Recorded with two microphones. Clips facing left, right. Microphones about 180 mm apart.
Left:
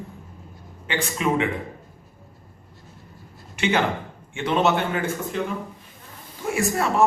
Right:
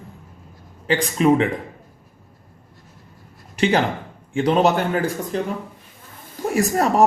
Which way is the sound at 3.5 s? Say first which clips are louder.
Right 3 dB; 35° right (ahead or behind).